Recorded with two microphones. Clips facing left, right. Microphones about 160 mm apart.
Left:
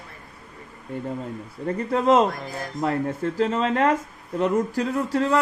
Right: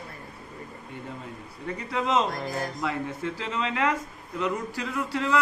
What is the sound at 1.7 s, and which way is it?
A man's voice, 45° left (ahead or behind).